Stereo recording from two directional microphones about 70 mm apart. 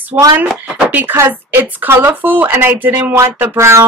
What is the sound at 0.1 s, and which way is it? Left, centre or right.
Speech, right.